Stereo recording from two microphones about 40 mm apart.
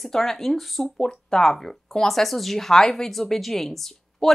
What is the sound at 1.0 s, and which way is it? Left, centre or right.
Speech, centre.